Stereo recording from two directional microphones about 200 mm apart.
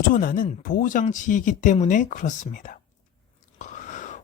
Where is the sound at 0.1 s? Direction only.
45° left (ahead or behind).